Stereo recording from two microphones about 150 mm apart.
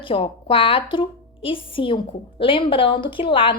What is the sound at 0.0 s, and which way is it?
Speech, 35° left (ahead or behind).